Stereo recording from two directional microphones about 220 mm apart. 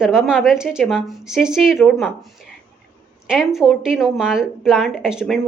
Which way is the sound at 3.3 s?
Centre (ahead or behind).